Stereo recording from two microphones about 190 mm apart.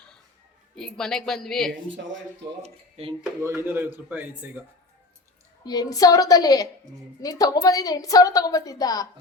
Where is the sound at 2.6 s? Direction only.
30° right (ahead or behind).